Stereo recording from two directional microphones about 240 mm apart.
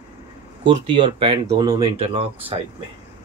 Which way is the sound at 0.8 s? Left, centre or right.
Centre.